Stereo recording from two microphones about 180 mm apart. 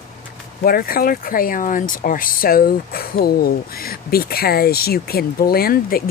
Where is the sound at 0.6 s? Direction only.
55° left (ahead or behind).